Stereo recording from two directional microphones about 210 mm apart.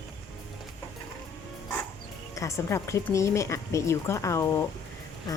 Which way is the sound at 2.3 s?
15° left (ahead or behind).